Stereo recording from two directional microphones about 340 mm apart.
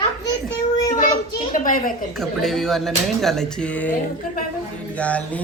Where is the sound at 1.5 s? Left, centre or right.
Left.